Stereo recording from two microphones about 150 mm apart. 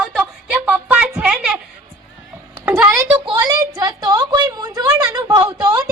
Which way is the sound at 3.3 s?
25° right (ahead or behind).